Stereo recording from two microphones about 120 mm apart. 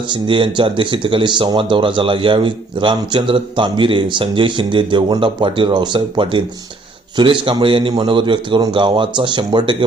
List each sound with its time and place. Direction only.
0.1 s speech: 45° right (ahead or behind)